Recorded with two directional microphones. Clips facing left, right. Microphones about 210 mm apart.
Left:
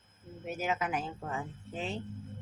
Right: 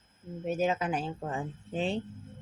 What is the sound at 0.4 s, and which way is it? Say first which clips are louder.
Crowing: right 5 dB; 30° right (ahead or behind).